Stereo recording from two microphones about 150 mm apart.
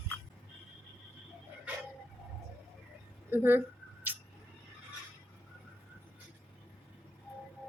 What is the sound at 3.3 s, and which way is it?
Speech, 15° right (ahead or behind).